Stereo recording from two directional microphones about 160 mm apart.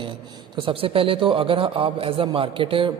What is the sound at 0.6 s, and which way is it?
A man's voice, 35° right (ahead or behind).